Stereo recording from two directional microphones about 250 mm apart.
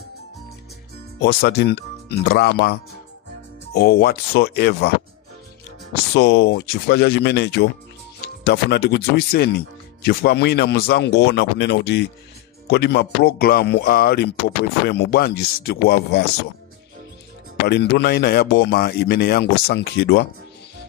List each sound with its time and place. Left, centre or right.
1.2 s speech: left
6.1 s speech: left
17.6 s speech: left